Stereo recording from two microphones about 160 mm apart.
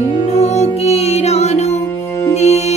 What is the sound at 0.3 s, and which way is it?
Music, 45° left (ahead or behind).